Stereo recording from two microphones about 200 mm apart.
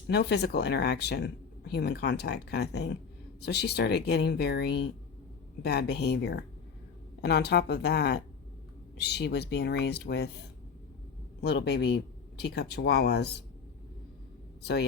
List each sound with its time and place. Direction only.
0.1 s speech: 55° left (ahead or behind)
11.3 s speech: 55° left (ahead or behind)
14.6 s speech: 55° left (ahead or behind)